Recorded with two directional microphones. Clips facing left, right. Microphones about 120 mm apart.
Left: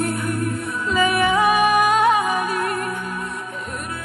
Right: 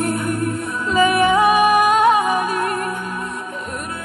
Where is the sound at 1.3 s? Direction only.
20° right (ahead or behind).